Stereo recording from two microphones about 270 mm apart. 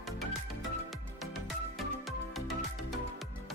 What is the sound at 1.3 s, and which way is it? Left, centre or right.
Music, centre.